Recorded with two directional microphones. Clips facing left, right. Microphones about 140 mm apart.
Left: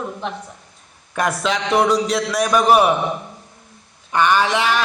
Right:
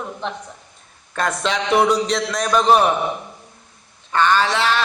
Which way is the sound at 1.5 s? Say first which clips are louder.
Right 1 dB; centre (ahead or behind).